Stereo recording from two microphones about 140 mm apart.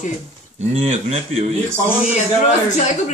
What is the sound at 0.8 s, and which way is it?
Speech, 50° right (ahead or behind).